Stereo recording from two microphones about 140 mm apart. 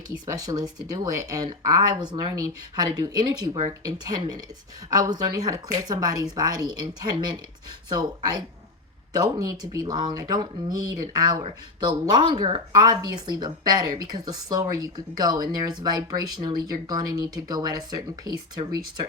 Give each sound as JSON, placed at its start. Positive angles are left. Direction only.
{"t": 0.3, "sound": "speech", "side_deg": -25}